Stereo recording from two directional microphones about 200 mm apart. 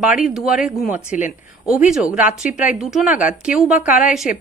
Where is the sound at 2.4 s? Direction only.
5° right (ahead or behind).